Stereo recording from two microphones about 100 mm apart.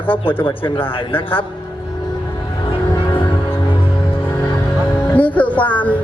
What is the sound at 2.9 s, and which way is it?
Music, 50° left (ahead or behind).